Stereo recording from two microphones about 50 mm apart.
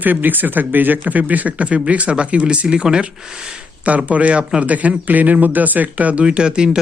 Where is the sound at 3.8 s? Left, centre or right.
Right.